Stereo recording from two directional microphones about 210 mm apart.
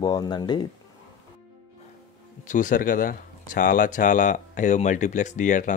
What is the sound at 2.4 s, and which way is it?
Speech, 40° left (ahead or behind).